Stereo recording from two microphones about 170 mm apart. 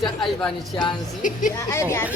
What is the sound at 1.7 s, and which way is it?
Speech, 15° left (ahead or behind).